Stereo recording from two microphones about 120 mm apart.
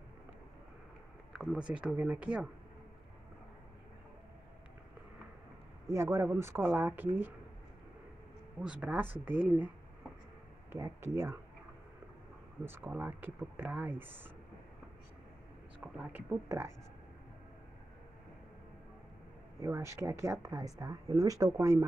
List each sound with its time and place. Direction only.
1.3 s speech: 5° right (ahead or behind)
5.9 s speech: 20° right (ahead or behind)
8.5 s speech: 10° right (ahead or behind)
10.7 s speech: 25° right (ahead or behind)
12.6 s speech: 15° right (ahead or behind)
15.8 s speech: 10° right (ahead or behind)
16.4 s speech: 25° right (ahead or behind)
19.6 s speech: 25° right (ahead or behind)